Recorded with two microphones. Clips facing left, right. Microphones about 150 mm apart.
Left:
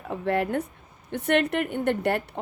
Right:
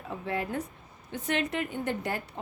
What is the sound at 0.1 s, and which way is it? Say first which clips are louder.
A woman's voice: left 7 dB; 65° left (ahead or behind).